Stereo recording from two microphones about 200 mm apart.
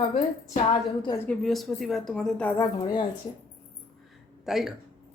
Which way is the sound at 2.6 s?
20° left (ahead or behind).